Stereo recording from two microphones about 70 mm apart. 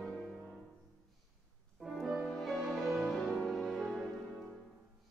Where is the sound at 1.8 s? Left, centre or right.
Centre.